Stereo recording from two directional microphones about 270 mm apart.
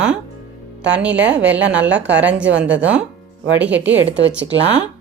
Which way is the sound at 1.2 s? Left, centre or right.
Right.